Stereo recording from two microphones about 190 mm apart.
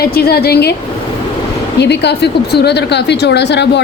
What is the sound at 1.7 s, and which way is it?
A woman's voice, 65° left (ahead or behind).